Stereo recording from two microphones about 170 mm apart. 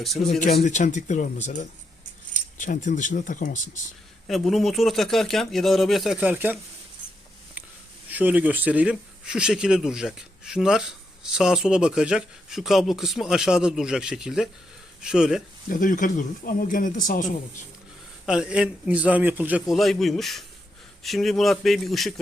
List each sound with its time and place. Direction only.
0.0 s speech: centre (ahead or behind)
0.3 s speech: 45° left (ahead or behind)
2.6 s speech: 50° left (ahead or behind)
4.3 s speech: centre (ahead or behind)
8.1 s speech: 10° right (ahead or behind)
15.7 s speech: 50° left (ahead or behind)
18.3 s a man's voice: 5° right (ahead or behind)